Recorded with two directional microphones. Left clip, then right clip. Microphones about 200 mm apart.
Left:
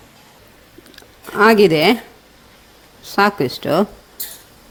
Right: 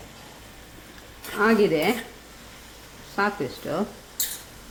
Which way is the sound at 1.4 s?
45° left (ahead or behind).